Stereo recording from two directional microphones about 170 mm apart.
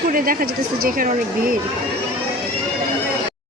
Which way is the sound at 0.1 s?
55° right (ahead or behind).